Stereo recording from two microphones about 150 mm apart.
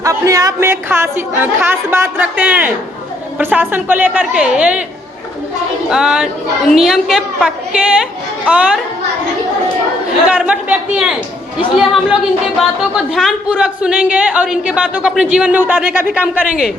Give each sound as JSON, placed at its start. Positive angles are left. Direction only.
{"t": 0.0, "sound": "speech", "side_deg": -20}
{"t": 5.9, "sound": "speech", "side_deg": -5}
{"t": 10.2, "sound": "speech", "side_deg": -10}